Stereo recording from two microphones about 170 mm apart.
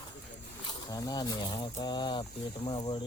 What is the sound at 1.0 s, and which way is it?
Speech, 25° left (ahead or behind).